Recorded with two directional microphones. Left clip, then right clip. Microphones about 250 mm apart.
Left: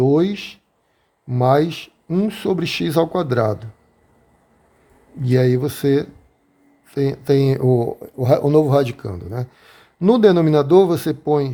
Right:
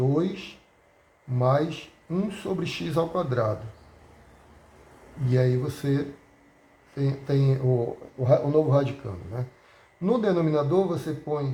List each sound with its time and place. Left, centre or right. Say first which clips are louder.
0.2 s speech: left 8 dB; left
5.3 s speech: left 8 dB; left
8.2 s speech: left 7 dB; left